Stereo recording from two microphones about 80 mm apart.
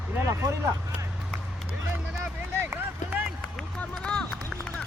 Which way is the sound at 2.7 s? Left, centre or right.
Right.